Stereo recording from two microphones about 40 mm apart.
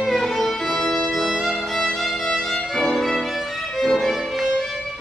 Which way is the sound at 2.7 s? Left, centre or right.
Centre.